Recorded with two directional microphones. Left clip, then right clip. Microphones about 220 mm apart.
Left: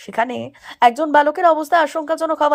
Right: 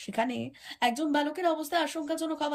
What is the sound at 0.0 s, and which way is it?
A woman's voice, 15° left (ahead or behind).